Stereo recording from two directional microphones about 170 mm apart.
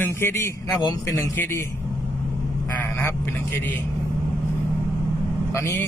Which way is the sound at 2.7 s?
15° left (ahead or behind).